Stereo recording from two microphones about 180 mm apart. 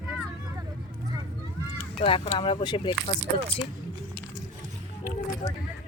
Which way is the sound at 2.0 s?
30° left (ahead or behind).